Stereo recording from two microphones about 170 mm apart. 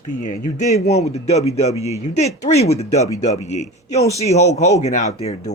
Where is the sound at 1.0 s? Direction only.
40° left (ahead or behind).